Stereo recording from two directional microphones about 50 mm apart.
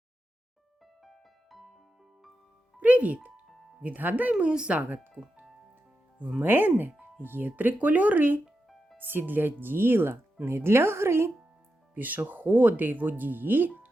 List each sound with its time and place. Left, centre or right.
1.0 s music: centre
2.8 s speech: right
6.4 s a woman's voice: right
11.9 s speech: right